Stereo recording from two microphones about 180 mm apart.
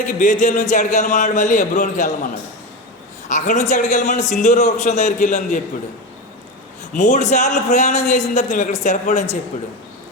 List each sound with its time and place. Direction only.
0.2 s a man's voice: 45° left (ahead or behind)
6.9 s a man's voice: 40° left (ahead or behind)